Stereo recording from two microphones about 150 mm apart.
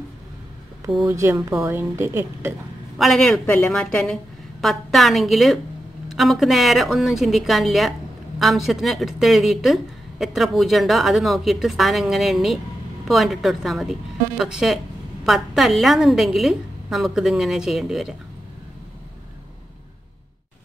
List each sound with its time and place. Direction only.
1.0 s a woman's voice: 20° right (ahead or behind)
3.0 s speech: centre (ahead or behind)